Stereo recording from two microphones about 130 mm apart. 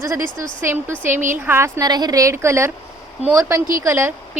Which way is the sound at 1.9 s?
30° right (ahead or behind).